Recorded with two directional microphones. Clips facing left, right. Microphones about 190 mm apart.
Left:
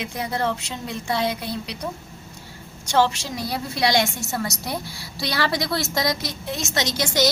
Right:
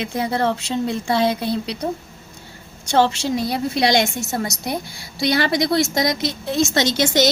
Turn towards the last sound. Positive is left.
turn(degrees=-25)  # may be behind; listen again after turning